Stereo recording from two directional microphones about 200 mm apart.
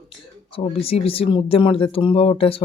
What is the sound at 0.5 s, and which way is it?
Speech, 30° left (ahead or behind).